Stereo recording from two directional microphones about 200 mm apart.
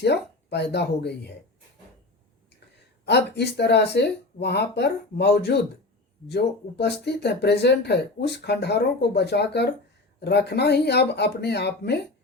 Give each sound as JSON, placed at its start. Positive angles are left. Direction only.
{"t": 0.0, "sound": "speech", "side_deg": 55}
{"t": 3.1, "sound": "speech", "side_deg": 55}